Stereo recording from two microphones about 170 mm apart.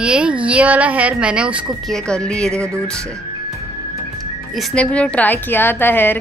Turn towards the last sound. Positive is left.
turn(degrees=10)  # may be behind; listen again after turning